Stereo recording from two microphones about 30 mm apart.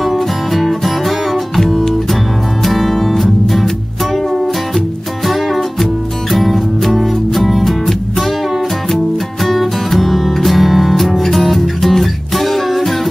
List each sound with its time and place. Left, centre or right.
0.0 s music: centre
1.7 s music: centre
8.9 s music: centre